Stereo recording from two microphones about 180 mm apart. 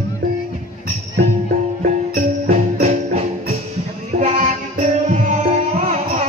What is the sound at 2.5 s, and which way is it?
Music, 40° right (ahead or behind).